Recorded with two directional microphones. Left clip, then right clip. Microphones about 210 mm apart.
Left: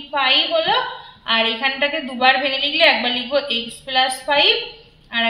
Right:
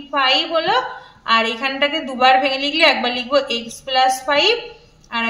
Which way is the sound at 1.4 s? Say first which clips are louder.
Even; 45° right (ahead or behind).